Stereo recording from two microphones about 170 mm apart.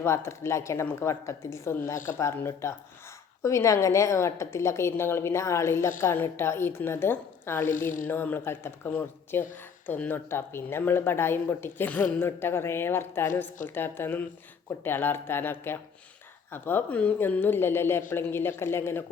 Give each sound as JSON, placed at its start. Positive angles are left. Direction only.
{"t": 0.0, "sound": "speech", "side_deg": 15}